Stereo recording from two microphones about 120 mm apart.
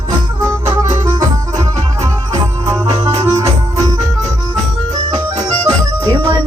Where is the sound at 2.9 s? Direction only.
40° right (ahead or behind).